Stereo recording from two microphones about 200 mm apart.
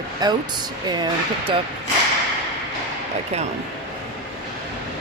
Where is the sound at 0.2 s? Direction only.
20° right (ahead or behind).